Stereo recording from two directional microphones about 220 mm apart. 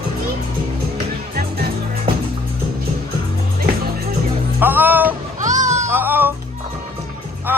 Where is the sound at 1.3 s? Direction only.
45° right (ahead or behind).